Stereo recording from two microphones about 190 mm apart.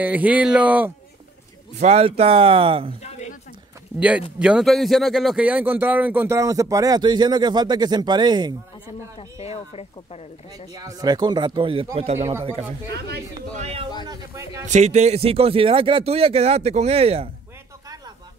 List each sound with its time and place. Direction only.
0.0 s a man's voice: 10° right (ahead or behind)
1.8 s speech: 35° right (ahead or behind)
3.0 s a sound: 35° left (ahead or behind)
4.4 s a man's voice: 5° right (ahead or behind); by 8.9 s 20° right (ahead or behind)
9.4 s speech: 30° left (ahead or behind)
10.7 s speech: 20° right (ahead or behind)
12.2 s a man's voice: 15° right (ahead or behind)
14.0 s a sound: 20° right (ahead or behind)
14.7 s speech: 35° right (ahead or behind)